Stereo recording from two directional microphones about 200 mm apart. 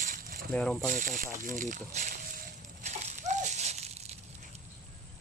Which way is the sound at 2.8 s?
35° right (ahead or behind).